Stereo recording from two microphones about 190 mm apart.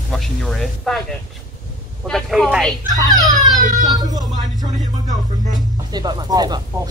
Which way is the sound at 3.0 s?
20° right (ahead or behind).